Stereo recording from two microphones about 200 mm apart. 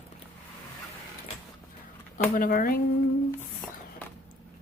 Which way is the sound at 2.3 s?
45° left (ahead or behind).